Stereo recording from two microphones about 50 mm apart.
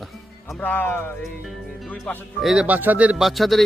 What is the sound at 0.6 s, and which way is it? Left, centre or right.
Speech, left.